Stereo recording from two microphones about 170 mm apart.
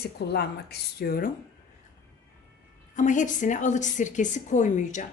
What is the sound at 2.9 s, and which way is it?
A woman's voice, 45° left (ahead or behind).